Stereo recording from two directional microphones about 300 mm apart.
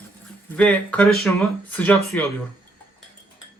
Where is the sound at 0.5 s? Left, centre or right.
Centre.